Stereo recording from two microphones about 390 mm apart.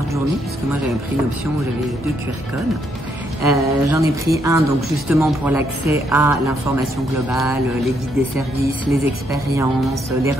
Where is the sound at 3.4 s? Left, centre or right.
Centre.